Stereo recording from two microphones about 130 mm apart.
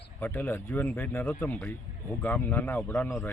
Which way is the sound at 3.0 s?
20° left (ahead or behind).